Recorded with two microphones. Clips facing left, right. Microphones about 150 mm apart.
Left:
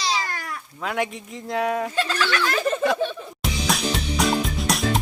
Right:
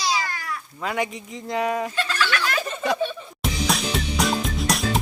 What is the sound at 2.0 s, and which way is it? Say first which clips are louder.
Speech: left 2 dB; 35° left (ahead or behind).